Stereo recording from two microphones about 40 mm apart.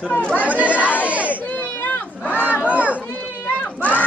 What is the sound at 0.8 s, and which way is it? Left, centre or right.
Speech, left.